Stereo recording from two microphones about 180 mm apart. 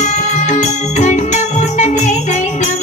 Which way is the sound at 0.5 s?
40° left (ahead or behind).